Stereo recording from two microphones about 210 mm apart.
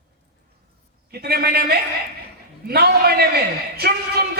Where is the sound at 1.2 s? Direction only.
50° right (ahead or behind).